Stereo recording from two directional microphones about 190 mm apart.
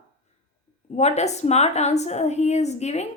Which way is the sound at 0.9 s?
35° left (ahead or behind).